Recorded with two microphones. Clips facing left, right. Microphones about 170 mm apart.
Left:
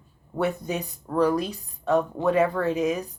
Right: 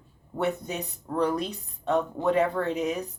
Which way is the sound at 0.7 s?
20° right (ahead or behind).